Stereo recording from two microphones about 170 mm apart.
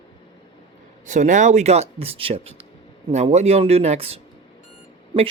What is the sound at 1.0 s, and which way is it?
Speech, 45° right (ahead or behind).